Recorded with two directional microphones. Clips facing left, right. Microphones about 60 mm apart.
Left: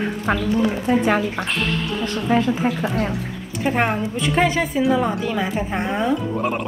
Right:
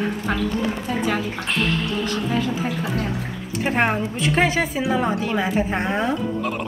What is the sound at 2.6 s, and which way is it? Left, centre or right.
Speech, left.